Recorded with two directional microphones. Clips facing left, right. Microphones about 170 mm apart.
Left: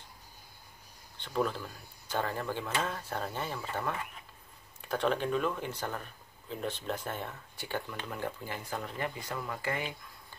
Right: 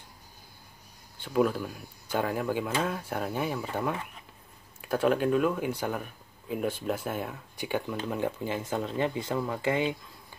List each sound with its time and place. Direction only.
1.1 s speech: 5° right (ahead or behind); by 9.9 s 25° right (ahead or behind)